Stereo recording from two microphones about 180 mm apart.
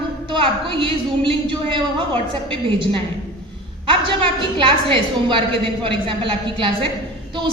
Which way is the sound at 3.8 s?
30° right (ahead or behind).